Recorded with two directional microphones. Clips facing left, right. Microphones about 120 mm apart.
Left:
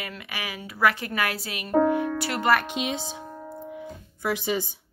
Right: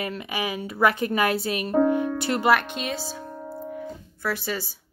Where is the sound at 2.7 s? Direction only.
15° left (ahead or behind).